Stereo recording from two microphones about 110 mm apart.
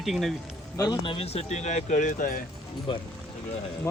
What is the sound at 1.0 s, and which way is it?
Speech, 55° left (ahead or behind).